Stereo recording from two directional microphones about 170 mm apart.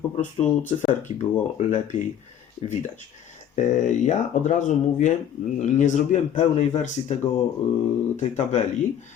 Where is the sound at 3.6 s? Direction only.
45° left (ahead or behind).